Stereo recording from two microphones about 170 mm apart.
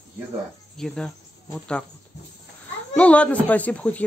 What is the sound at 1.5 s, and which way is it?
Speech, 5° left (ahead or behind).